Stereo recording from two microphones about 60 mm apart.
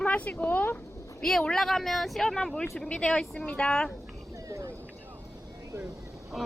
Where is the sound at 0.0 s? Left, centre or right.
Left.